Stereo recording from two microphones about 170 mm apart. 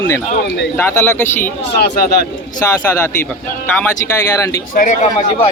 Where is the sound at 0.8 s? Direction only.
15° left (ahead or behind).